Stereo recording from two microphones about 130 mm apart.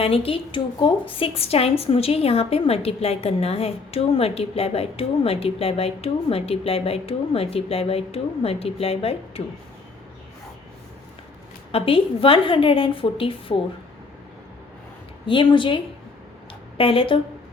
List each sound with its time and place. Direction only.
0.0 s a woman's voice: 45° left (ahead or behind)
11.7 s a woman's voice: 45° left (ahead or behind)
15.3 s speech: 40° left (ahead or behind)